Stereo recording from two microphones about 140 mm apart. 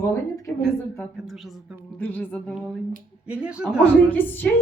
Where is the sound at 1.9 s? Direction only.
10° left (ahead or behind).